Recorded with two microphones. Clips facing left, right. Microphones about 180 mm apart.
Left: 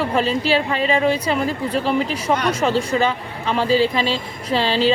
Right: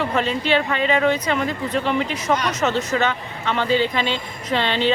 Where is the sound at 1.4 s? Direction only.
35° left (ahead or behind).